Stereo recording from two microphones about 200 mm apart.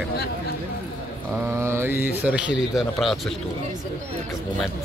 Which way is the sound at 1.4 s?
10° right (ahead or behind).